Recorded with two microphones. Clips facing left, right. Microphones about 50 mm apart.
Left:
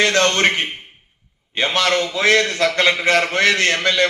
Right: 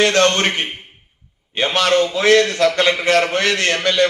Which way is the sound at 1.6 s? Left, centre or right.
Right.